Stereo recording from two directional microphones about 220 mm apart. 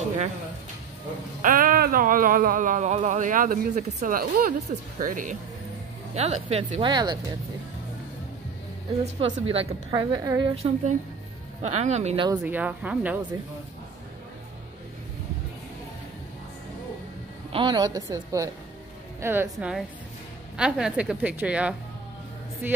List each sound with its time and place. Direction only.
1.4 s a woman's voice: 40° right (ahead or behind); by 7.2 s 20° right (ahead or behind)
9.0 s a woman's voice: 25° right (ahead or behind)
10.5 s a woman's voice: 30° right (ahead or behind)
12.3 s a woman's voice: 10° right (ahead or behind)
17.5 s a woman's voice: 20° right (ahead or behind); by 21.7 s 5° right (ahead or behind)